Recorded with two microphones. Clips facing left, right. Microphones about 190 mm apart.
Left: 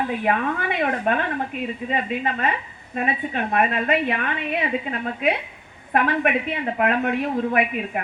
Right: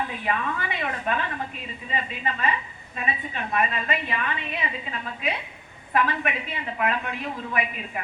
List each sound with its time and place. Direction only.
0.1 s a woman's voice: 55° left (ahead or behind)